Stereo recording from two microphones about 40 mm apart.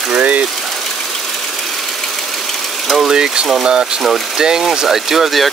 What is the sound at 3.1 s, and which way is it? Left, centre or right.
Speech, centre.